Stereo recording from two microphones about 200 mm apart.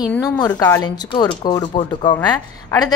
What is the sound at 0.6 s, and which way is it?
A woman's voice, 15° left (ahead or behind).